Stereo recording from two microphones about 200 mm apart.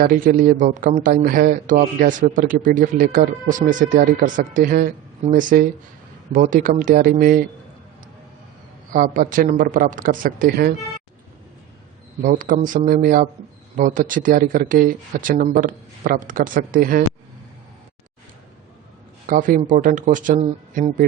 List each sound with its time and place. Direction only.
0.0 s a man's voice: 45° right (ahead or behind)
8.9 s a man's voice: 40° right (ahead or behind)
12.2 s a man's voice: 40° right (ahead or behind)
19.3 s speech: 40° right (ahead or behind)